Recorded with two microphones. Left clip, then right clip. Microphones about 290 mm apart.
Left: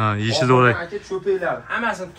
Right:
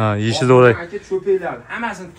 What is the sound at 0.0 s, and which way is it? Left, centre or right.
Speech, centre.